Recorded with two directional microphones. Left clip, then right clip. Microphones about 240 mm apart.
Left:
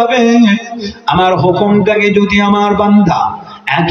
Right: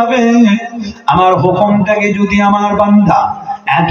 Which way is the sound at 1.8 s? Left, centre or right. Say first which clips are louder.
Left 2 dB; left.